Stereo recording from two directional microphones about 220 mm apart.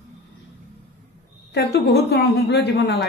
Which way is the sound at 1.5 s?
45° left (ahead or behind).